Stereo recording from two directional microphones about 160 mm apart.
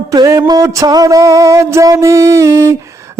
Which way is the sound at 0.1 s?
20° right (ahead or behind).